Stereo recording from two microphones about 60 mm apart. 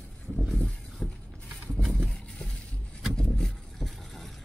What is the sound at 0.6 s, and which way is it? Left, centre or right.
Vehicle, centre.